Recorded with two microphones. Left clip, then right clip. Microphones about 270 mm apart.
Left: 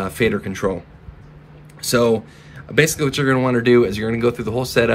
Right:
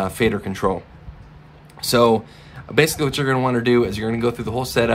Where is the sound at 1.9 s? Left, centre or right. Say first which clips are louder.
Right 1 dB; centre.